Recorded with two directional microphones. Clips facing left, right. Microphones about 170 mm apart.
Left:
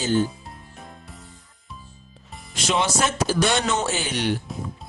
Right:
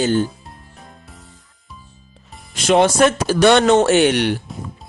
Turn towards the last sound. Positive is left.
turn(degrees=-70)  # may be behind; listen again after turning